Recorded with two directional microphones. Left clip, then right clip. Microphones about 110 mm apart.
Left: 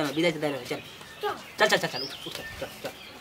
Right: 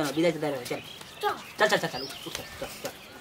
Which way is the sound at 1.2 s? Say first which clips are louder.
Right 2 dB; 50° right (ahead or behind).